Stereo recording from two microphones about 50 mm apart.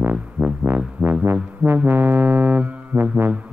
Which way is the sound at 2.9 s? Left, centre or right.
Centre.